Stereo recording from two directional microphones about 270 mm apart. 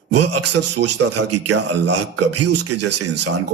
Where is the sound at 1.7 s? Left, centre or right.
Right.